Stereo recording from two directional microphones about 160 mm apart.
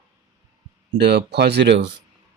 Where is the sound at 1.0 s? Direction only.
90° right.